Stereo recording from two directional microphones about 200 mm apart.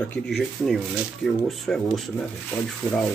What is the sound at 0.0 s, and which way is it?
Speech, 5° left (ahead or behind).